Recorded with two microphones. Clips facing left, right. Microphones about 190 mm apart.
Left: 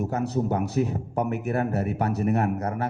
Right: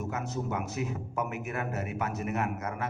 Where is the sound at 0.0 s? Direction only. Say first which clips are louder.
Left 8 dB; 35° left (ahead or behind).